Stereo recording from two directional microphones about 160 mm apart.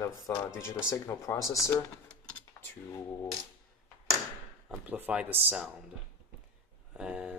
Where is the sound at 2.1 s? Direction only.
5° left (ahead or behind).